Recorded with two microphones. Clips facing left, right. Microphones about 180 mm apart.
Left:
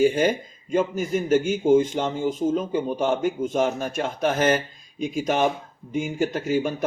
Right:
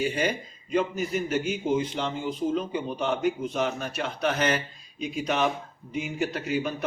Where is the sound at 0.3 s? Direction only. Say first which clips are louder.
Left 5 dB; 45° left (ahead or behind).